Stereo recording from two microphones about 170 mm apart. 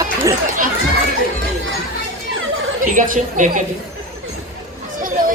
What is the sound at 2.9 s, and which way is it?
Speech, 50° right (ahead or behind).